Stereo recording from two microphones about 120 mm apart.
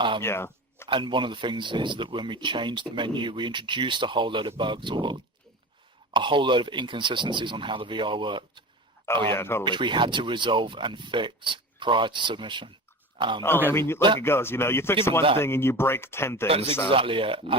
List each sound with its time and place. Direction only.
0.2 s a sound: 20° left (ahead or behind)
0.9 s speech: 45° right (ahead or behind)
9.3 s speech: 20° left (ahead or behind)
9.6 s speech: 40° right (ahead or behind)
13.7 s speech: 20° left (ahead or behind)
16.5 s speech: 55° right (ahead or behind)